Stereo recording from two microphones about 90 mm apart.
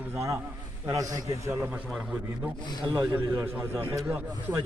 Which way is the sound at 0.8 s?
40° right (ahead or behind).